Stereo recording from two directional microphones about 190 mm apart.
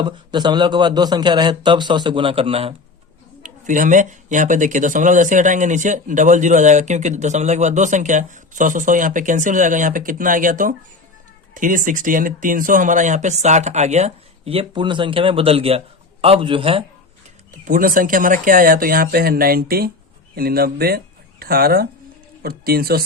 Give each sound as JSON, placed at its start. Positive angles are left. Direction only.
{"t": 0.0, "sound": "a man's voice", "side_deg": -25}
{"t": 3.4, "sound": "a man's voice", "side_deg": -40}
{"t": 17.5, "sound": "speech", "side_deg": -45}